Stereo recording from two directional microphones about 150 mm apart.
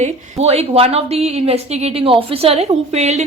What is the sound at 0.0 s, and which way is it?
A woman's voice, 45° right (ahead or behind).